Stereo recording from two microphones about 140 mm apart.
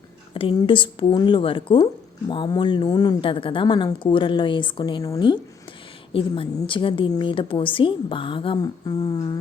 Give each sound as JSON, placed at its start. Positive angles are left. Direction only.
{"t": 0.3, "sound": "a woman's voice", "side_deg": 35}
{"t": 6.1, "sound": "a woman's voice", "side_deg": 40}